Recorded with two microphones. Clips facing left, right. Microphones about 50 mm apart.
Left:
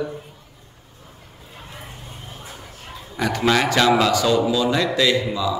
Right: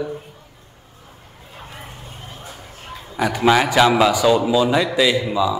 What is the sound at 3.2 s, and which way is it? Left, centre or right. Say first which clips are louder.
A man's voice: right 3 dB; centre.